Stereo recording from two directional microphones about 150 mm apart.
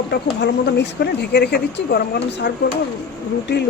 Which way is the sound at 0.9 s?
90° left.